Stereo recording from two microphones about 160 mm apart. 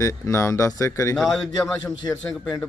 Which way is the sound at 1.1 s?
Centre (ahead or behind).